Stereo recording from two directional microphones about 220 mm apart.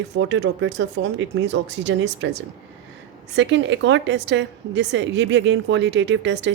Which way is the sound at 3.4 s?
55° right (ahead or behind).